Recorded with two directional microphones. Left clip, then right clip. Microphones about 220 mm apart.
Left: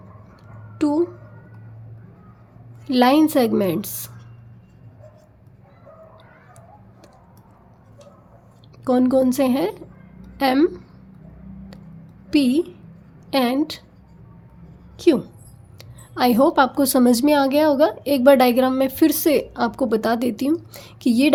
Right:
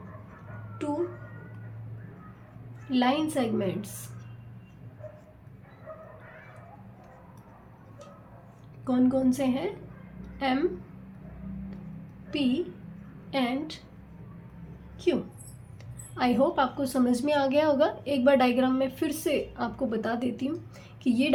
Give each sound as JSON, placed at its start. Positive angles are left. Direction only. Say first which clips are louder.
{"t": 0.8, "sound": "speech", "louder": "left 11 dB", "side_deg": 55}
{"t": 2.9, "sound": "a woman's voice", "louder": "left 11 dB", "side_deg": 50}
{"t": 8.8, "sound": "a woman's voice", "louder": "left 9 dB", "side_deg": 50}
{"t": 10.2, "sound": "a sound", "louder": "left 10 dB", "side_deg": 50}
{"t": 12.3, "sound": "a woman's voice", "louder": "left 10 dB", "side_deg": 55}
{"t": 14.9, "sound": "a sound", "louder": "left 10 dB", "side_deg": 55}
{"t": 15.8, "sound": "a woman's voice", "louder": "left 9 dB", "side_deg": 45}